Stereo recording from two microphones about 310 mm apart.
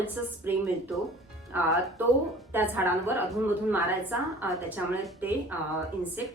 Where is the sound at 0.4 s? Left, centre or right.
Centre.